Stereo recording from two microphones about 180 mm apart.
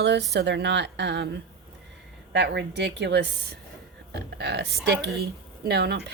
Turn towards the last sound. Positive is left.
turn(degrees=-65)  # may be behind; listen again after turning